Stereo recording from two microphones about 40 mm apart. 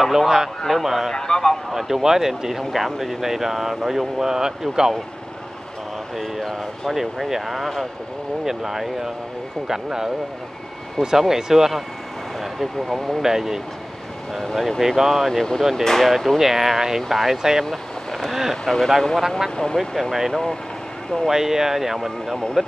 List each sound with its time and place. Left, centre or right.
0.0 s speech: centre
1.1 s a man's voice: centre
1.7 s speech: centre
6.9 s speech: centre
12.5 s speech: centre
13.2 s speech: centre
17.6 s vehicle: centre
18.7 s speech: centre
19.5 s speech: centre
19.8 s speech: centre